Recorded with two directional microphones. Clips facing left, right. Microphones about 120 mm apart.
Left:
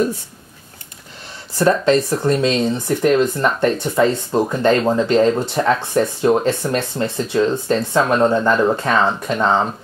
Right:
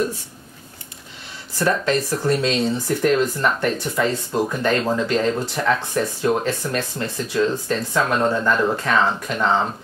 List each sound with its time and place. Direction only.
1.6 s speech: 25° left (ahead or behind)